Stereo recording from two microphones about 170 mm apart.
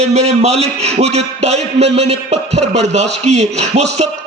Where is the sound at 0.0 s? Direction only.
40° right (ahead or behind).